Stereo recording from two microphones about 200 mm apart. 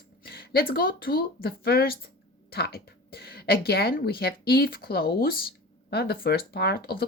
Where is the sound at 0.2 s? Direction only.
50° left (ahead or behind).